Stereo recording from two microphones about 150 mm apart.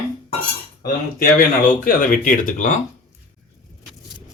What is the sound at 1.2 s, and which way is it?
Speech, 70° left (ahead or behind).